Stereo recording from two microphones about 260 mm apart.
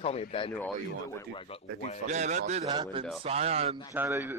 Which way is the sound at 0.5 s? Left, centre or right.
Centre.